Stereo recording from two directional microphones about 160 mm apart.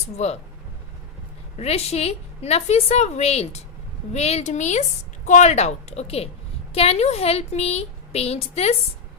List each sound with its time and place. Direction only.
0.2 s speech: 45° left (ahead or behind)
1.5 s a woman's voice: 40° left (ahead or behind)